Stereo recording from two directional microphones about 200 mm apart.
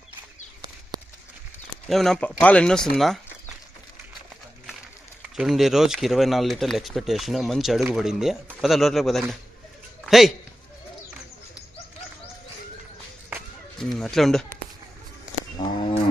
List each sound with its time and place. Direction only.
1.9 s speech: centre (ahead or behind)
5.4 s a man's voice: centre (ahead or behind)
13.7 s speech: centre (ahead or behind)
15.5 s a sound: 20° left (ahead or behind)